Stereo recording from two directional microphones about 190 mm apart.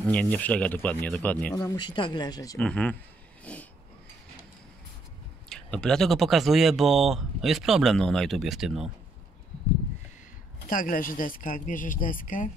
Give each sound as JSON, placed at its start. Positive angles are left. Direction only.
{"t": 0.0, "sound": "speech", "side_deg": 5}
{"t": 1.5, "sound": "speech", "side_deg": 20}
{"t": 2.6, "sound": "speech", "side_deg": 5}
{"t": 3.5, "sound": "a sound", "side_deg": 5}
{"t": 5.5, "sound": "speech", "side_deg": 5}
{"t": 10.7, "sound": "speech", "side_deg": 45}